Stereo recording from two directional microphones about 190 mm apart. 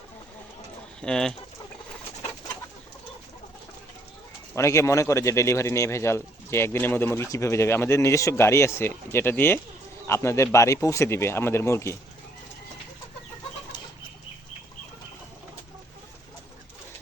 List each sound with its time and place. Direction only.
1.0 s speech: 5° left (ahead or behind)
4.5 s speech: 15° left (ahead or behind)
13.7 s chicken: 25° left (ahead or behind)